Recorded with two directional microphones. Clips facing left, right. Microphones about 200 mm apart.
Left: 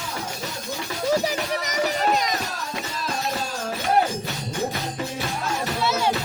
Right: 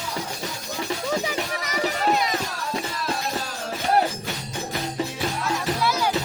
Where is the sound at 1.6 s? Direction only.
45° left (ahead or behind).